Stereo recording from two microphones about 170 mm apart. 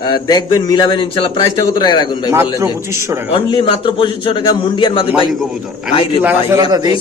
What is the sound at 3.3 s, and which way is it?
A man's voice, 30° left (ahead or behind).